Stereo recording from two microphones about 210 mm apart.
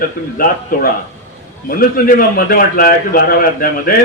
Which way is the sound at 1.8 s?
45° left (ahead or behind).